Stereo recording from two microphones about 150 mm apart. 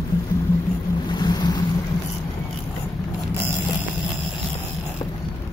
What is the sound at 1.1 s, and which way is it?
Boat, 30° left (ahead or behind).